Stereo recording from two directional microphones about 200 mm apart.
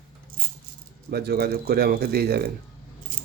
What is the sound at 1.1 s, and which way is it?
Speech, 55° right (ahead or behind).